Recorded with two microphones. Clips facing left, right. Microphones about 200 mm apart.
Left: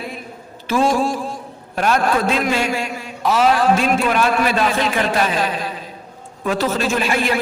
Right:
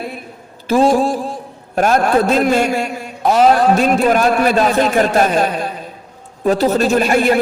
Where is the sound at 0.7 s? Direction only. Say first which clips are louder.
Right 5 dB; 35° right (ahead or behind).